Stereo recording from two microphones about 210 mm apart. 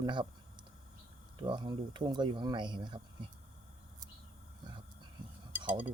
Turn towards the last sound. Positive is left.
turn(degrees=-10)  # may be behind; listen again after turning